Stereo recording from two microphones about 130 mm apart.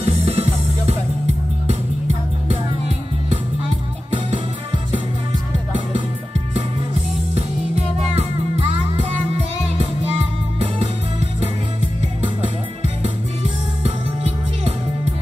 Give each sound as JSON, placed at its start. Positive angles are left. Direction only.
{"t": 0.0, "sound": "music", "side_deg": -50}
{"t": 7.3, "sound": "music", "side_deg": -50}